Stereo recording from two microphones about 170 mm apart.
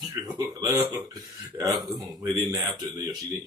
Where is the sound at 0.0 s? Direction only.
20° right (ahead or behind).